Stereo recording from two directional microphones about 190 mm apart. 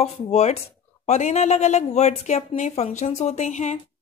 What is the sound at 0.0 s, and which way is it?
Speech, 35° left (ahead or behind).